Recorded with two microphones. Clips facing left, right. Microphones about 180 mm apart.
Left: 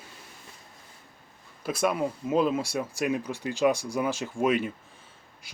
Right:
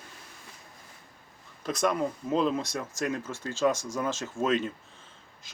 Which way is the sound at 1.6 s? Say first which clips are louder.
Left 1 dB; 5° left (ahead or behind).